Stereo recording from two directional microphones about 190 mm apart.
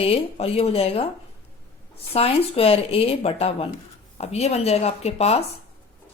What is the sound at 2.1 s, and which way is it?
Speech, 30° left (ahead or behind).